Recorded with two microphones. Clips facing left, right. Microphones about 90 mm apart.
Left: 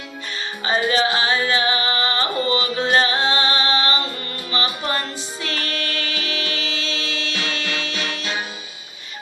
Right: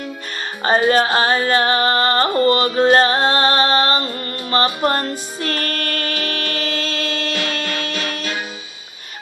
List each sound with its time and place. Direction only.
0.6 s music: 45° right (ahead or behind)